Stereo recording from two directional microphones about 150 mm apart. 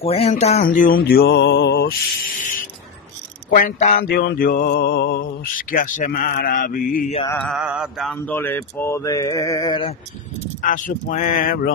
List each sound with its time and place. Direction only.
0.0 s a sound: 40° left (ahead or behind)
0.7 s music: 65° left (ahead or behind)
3.5 s mantra: 60° left (ahead or behind)
7.2 s mantra: 10° left (ahead or behind)
7.5 s mantra: 5° right (ahead or behind)
8.3 s mantra: 15° left (ahead or behind)
10.6 s speech: 60° left (ahead or behind)